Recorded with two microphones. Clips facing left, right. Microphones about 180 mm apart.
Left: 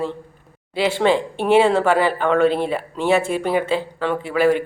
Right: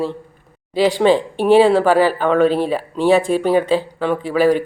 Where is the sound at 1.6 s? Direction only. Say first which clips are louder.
Right 3 dB; 10° right (ahead or behind).